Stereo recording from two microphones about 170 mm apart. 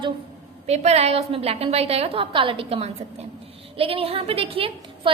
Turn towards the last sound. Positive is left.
turn(degrees=-35)  # may be behind; listen again after turning